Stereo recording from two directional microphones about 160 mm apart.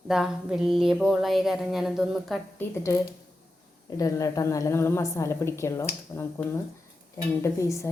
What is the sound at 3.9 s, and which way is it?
A woman's voice, 20° left (ahead or behind).